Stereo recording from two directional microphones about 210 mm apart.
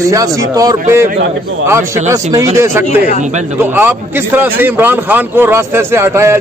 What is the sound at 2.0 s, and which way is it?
A man's voice, 15° right (ahead or behind).